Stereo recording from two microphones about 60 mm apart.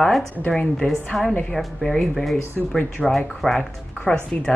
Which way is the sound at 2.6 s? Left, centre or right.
Centre.